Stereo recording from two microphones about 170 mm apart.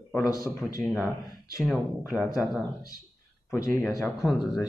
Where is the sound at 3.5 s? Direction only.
15° left (ahead or behind).